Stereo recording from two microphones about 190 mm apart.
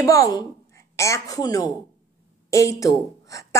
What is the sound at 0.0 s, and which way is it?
A woman's voice, 20° left (ahead or behind).